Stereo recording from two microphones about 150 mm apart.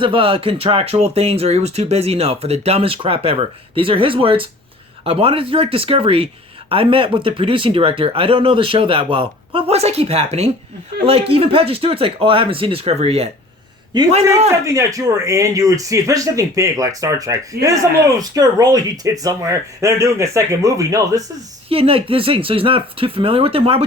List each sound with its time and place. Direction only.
0.0 s speech: 35° right (ahead or behind)
14.6 s speech: 20° right (ahead or behind)
21.7 s speech: 40° right (ahead or behind)